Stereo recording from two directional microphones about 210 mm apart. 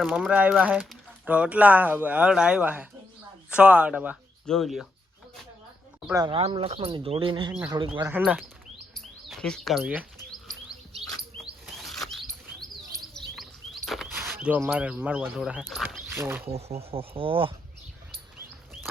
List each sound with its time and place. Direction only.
0.0 s speech: 5° right (ahead or behind)
6.1 s speech: 25° right (ahead or behind)
7.9 s speech: 10° right (ahead or behind)
9.0 s chirp: 5° left (ahead or behind)
11.6 s rodents: centre (ahead or behind)
13.0 s chirp: centre (ahead or behind)
16.1 s speech: 10° right (ahead or behind)
16.5 s speech: 30° right (ahead or behind)